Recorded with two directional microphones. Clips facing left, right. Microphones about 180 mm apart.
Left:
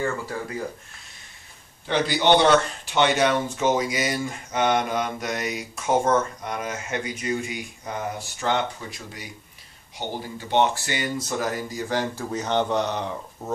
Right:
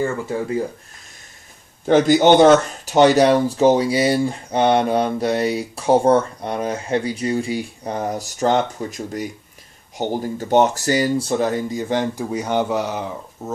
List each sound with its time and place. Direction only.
1.9 s speech: 45° right (ahead or behind); by 13.5 s centre (ahead or behind)